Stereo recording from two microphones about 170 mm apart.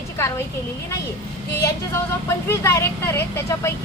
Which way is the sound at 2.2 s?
15° left (ahead or behind).